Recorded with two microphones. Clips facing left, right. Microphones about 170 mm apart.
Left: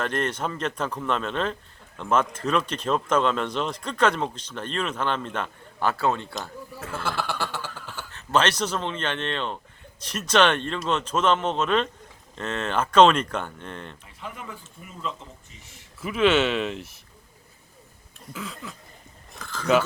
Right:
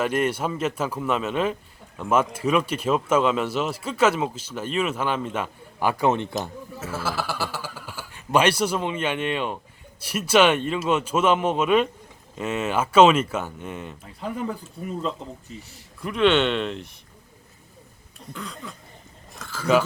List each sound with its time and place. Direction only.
0.0 s speech: 10° right (ahead or behind)
6.7 s speech: 5° right (ahead or behind)
14.2 s speech: 35° right (ahead or behind)
16.0 s speech: 5° left (ahead or behind)
18.3 s speech: centre (ahead or behind)